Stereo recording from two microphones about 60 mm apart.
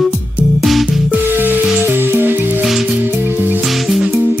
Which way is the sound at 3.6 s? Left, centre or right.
Centre.